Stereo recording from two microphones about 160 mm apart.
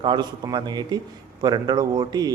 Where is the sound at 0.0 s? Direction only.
25° right (ahead or behind).